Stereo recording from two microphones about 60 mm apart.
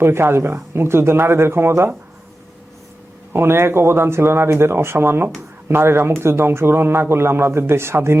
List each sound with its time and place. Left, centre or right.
0.0 s a man's voice: right
3.3 s a man's voice: right